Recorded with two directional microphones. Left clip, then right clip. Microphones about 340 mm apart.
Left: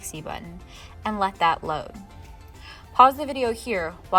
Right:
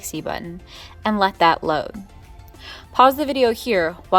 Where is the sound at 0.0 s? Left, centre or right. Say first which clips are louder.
Right 7 dB; centre.